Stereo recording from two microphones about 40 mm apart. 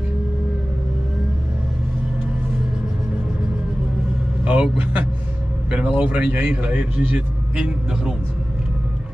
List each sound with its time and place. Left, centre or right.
4.5 s a man's voice: right
7.5 s a man's voice: right